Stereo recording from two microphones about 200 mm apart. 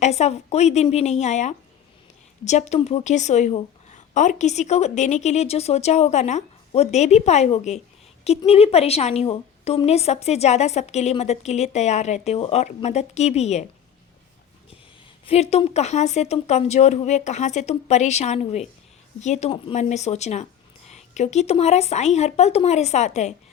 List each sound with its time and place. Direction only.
0.0 s a woman's voice: 35° left (ahead or behind)
15.3 s a woman's voice: 30° left (ahead or behind)